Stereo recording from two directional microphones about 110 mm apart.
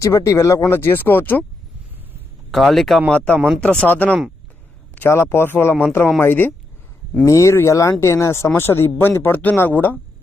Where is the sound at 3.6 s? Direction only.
10° left (ahead or behind).